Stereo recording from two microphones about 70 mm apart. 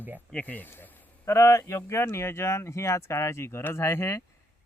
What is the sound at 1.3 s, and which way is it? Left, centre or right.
Speech, left.